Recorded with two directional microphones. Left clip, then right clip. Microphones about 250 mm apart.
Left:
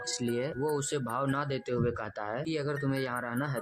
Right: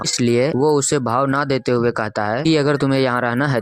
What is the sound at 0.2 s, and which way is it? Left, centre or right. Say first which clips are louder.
Speech: right 17 dB; right.